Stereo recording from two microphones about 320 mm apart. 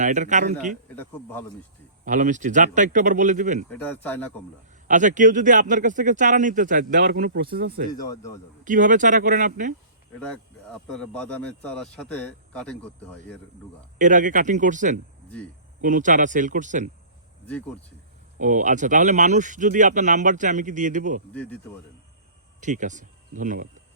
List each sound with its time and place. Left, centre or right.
0.0 s a man's voice: right
0.9 s speech: centre
2.0 s a man's voice: right
3.7 s speech: centre
4.9 s a man's voice: right
7.9 s speech: centre
8.6 s a man's voice: right
10.2 s speech: centre
14.0 s a man's voice: right
17.4 s speech: centre
18.3 s a man's voice: right
21.3 s speech: centre
22.6 s speech: right